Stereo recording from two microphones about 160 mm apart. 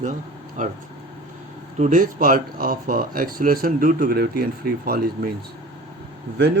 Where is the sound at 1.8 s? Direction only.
50° right (ahead or behind); by 5.3 s 70° right (ahead or behind).